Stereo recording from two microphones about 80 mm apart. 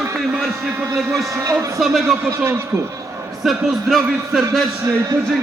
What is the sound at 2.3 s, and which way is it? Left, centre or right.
Speech, right.